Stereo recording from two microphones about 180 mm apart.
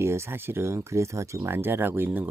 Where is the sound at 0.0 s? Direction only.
15° right (ahead or behind).